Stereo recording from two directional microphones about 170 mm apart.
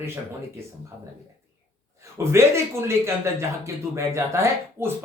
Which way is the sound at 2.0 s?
15° right (ahead or behind).